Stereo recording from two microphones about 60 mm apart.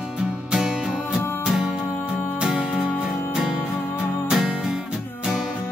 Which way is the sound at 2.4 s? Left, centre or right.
Centre.